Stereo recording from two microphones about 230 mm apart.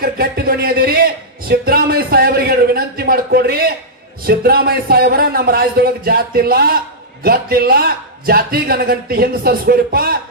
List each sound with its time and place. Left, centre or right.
0.0 s a man's voice: right